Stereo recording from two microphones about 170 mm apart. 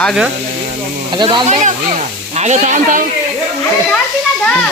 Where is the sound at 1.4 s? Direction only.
45° right (ahead or behind).